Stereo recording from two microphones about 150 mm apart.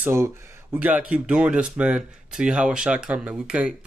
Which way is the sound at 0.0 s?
15° right (ahead or behind).